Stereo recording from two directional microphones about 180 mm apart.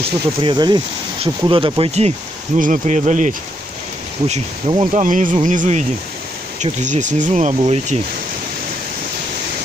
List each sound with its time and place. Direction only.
0.0 s speech: 30° right (ahead or behind)
5.0 s speech: 45° right (ahead or behind)